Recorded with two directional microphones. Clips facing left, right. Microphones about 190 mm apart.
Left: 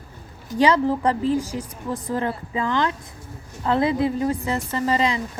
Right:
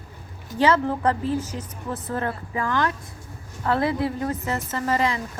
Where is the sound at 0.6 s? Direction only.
15° left (ahead or behind).